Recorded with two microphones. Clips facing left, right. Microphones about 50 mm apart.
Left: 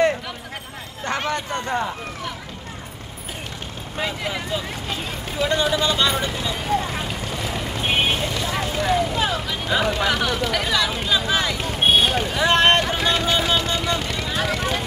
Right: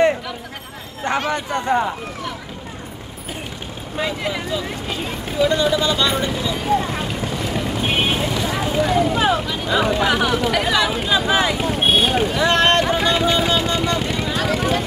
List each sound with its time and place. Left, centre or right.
1.3 s speech: centre
4.0 s speech: centre
5.4 s speech: centre
7.8 s vehicle: centre
8.2 s vehicle: centre
9.5 s speech: centre
9.8 s speech: centre
11.8 s a sound: centre
12.4 s boat: centre
13.0 s music: centre
13.6 s vehicle: centre
14.3 s vehicle: centre